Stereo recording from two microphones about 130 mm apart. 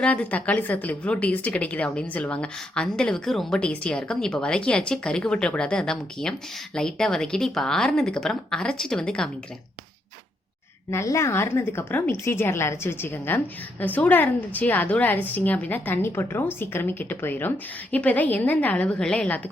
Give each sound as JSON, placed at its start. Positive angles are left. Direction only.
{"t": 0.0, "sound": "a woman's voice", "side_deg": 10}
{"t": 10.9, "sound": "a woman's voice", "side_deg": 20}